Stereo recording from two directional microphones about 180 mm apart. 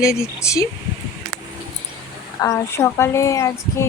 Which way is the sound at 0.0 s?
15° left (ahead or behind).